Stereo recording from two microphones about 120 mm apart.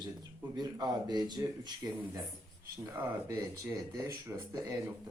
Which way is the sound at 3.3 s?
30° right (ahead or behind).